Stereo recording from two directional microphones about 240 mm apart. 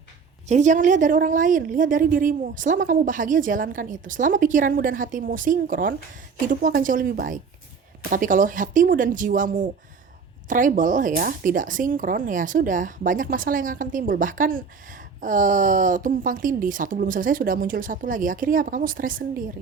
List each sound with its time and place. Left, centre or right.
0.4 s speech: right